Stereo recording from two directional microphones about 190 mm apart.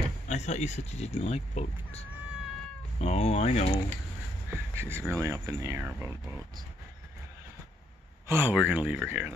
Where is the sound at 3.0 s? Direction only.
35° left (ahead or behind).